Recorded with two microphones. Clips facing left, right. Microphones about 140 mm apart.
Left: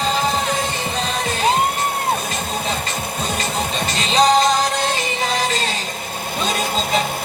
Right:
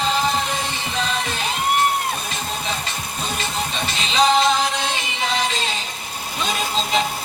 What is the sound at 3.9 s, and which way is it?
Music, 40° left (ahead or behind).